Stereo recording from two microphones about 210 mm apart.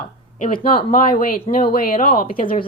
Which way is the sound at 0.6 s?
45° left (ahead or behind).